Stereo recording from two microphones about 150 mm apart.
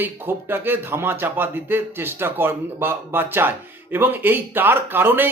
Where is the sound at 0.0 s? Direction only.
15° right (ahead or behind).